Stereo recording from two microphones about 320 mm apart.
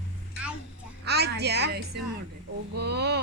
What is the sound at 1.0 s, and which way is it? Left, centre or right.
A woman's voice, right.